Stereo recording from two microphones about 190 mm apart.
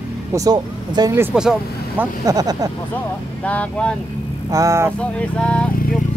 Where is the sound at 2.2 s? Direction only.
20° right (ahead or behind).